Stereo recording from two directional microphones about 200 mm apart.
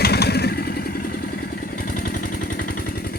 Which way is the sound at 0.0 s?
55° left (ahead or behind).